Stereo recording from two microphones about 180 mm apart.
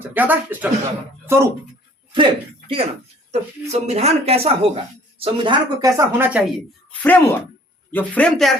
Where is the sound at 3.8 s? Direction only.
35° right (ahead or behind).